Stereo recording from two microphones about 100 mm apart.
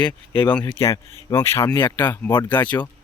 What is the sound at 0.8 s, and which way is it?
Speech, 30° left (ahead or behind).